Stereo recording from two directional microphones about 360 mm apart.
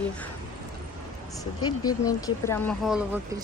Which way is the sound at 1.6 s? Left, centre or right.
Centre.